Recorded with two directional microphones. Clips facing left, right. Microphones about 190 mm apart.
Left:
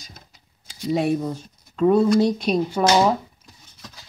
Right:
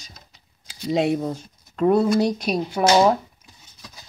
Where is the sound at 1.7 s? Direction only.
10° right (ahead or behind).